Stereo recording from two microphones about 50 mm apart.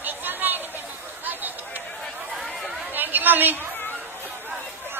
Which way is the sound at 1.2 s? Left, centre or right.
Right.